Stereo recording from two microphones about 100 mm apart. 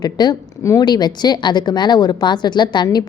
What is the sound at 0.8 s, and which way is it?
A woman's voice, 45° left (ahead or behind).